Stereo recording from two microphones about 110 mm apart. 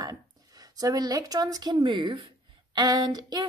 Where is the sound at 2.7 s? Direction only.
35° right (ahead or behind).